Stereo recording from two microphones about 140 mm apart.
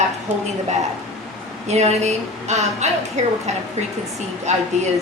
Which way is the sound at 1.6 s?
50° right (ahead or behind).